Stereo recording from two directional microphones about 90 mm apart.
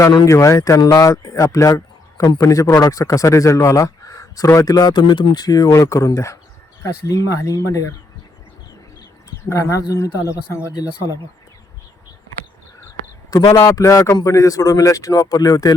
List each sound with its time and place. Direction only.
0.3 s a man's voice: 35° left (ahead or behind)
0.8 s a man's voice: 45° left (ahead or behind); by 5.4 s 65° left (ahead or behind)
5.4 s a man's voice: 40° left (ahead or behind)
9.4 s a man's voice: 35° left (ahead or behind)
13.5 s a man's voice: 40° left (ahead or behind)